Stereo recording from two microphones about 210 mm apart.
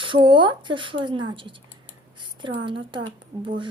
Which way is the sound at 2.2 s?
25° right (ahead or behind).